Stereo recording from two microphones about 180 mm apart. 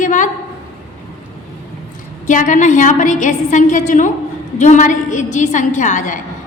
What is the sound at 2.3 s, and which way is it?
A woman's voice, 45° left (ahead or behind).